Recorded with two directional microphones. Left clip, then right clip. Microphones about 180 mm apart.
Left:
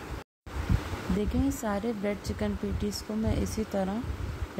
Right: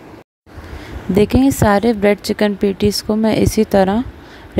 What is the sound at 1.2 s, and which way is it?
A woman's voice, 60° right (ahead or behind).